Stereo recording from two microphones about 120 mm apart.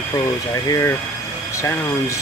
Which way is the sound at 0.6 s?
25° left (ahead or behind).